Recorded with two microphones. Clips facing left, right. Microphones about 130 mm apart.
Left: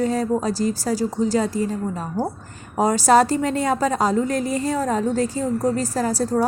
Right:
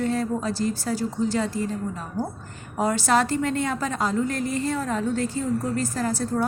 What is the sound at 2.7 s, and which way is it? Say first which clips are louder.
A woman's voice: left 6 dB; 40° left (ahead or behind).